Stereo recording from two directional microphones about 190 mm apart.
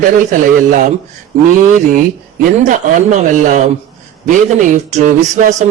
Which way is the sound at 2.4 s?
40° right (ahead or behind).